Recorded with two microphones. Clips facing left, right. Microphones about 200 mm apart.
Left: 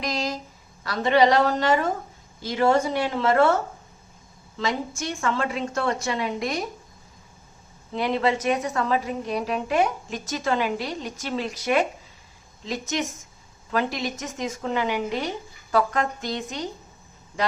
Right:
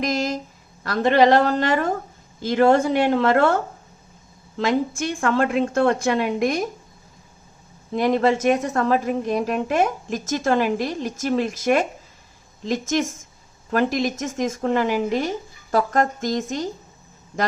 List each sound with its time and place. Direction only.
0.0 s a sound: 50° right (ahead or behind)
0.9 s a woman's voice: 55° right (ahead or behind)
7.9 s a woman's voice: 45° right (ahead or behind)